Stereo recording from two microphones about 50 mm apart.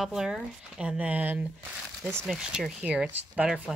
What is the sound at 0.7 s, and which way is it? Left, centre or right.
Speech, right.